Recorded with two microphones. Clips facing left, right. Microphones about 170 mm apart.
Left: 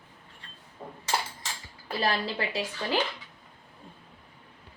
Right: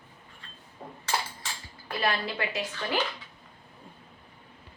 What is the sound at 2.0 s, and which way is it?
Speech, 30° left (ahead or behind).